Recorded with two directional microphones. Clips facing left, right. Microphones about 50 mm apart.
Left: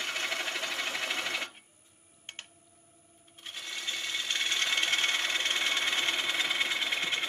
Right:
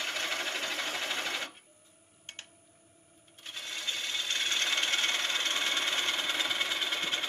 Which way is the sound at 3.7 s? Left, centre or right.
Left.